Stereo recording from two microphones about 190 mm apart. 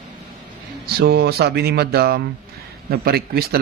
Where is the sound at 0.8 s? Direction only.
55° right (ahead or behind).